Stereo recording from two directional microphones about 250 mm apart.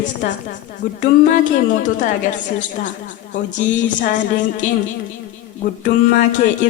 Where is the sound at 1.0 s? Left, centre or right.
Left.